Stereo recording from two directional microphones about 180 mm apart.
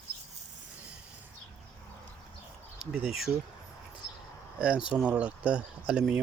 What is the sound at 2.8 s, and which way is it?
Speech, 5° right (ahead or behind).